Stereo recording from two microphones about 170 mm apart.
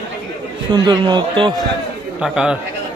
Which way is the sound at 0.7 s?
25° right (ahead or behind).